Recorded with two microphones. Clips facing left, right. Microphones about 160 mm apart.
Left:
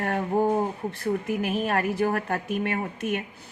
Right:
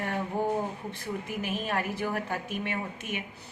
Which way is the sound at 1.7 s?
55° left (ahead or behind).